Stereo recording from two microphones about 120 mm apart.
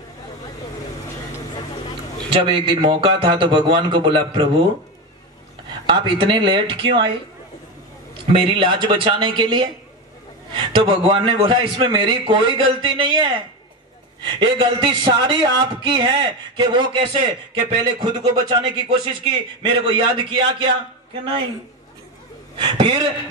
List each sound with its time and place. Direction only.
2.2 s a man's voice: 45° right (ahead or behind)
5.9 s a man's voice: 45° right (ahead or behind)
8.3 s a man's voice: 45° right (ahead or behind)
22.6 s a man's voice: 40° right (ahead or behind)